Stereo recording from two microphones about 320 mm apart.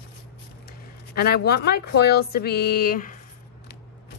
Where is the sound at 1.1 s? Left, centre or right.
Left.